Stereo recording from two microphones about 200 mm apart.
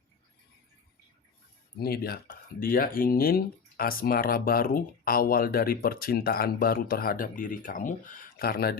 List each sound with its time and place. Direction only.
1.8 s speech: 50° left (ahead or behind)